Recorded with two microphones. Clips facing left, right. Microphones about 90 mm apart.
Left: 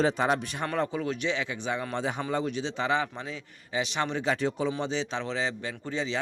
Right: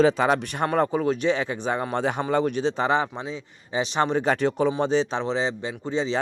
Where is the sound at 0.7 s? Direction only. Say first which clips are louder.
Right 7 dB; 40° right (ahead or behind).